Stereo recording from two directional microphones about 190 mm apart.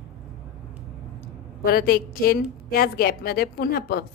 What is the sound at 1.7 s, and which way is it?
A woman's voice, 50° left (ahead or behind).